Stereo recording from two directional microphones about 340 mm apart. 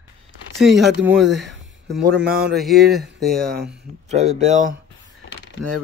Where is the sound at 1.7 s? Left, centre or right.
Centre.